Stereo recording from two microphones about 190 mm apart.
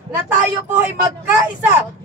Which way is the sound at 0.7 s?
10° right (ahead or behind).